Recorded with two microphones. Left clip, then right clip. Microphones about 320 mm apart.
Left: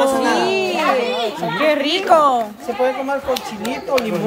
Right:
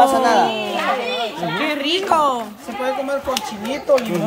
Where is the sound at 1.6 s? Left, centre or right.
Centre.